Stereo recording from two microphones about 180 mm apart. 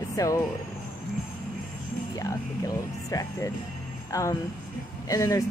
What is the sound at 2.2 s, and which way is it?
A woman's voice, 20° left (ahead or behind).